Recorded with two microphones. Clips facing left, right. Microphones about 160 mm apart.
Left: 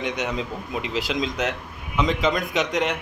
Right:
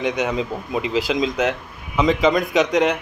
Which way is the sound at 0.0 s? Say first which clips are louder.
Right 5 dB; centre (ahead or behind).